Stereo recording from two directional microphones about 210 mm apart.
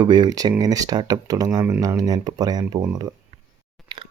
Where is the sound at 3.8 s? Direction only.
25° right (ahead or behind).